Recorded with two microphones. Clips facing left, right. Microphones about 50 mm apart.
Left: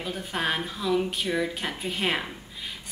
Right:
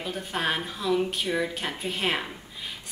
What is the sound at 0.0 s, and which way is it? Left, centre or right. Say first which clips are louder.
A woman's voice: even; centre.